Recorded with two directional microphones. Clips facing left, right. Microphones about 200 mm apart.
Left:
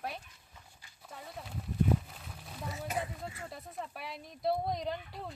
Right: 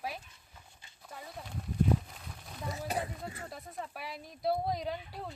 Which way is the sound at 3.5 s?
Centre (ahead or behind).